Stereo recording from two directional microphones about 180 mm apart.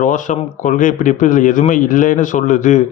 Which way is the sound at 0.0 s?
45° left (ahead or behind).